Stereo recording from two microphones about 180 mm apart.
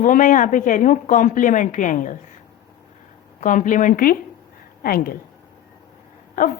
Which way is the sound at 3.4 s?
45° left (ahead or behind).